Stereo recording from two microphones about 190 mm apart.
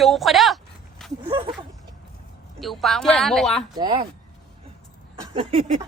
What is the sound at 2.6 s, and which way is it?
Speech, centre (ahead or behind).